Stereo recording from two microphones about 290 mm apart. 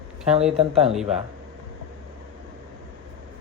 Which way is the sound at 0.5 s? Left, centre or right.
Centre.